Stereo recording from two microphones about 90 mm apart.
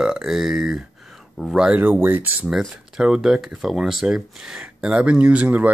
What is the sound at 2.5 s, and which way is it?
Speech, 5° right (ahead or behind).